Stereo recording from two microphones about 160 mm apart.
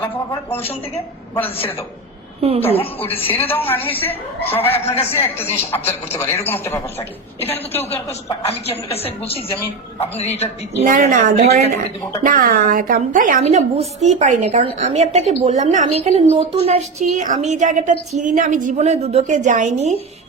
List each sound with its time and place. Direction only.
0.0 s speech: 15° left (ahead or behind)
2.7 s a woman's voice: 35° left (ahead or behind)
3.3 s speech: 10° left (ahead or behind)
4.7 s a woman's voice: 40° left (ahead or behind)
5.1 s speech: 15° left (ahead or behind)
8.4 s a woman's voice: 40° left (ahead or behind)
10.0 s a woman's voice: 40° left (ahead or behind)
10.8 s a woman's voice: 55° right (ahead or behind)
12.2 s a woman's voice: 60° right (ahead or behind)
13.4 s a woman's voice: 40° right (ahead or behind)
17.0 s a woman's voice: 50° right (ahead or behind)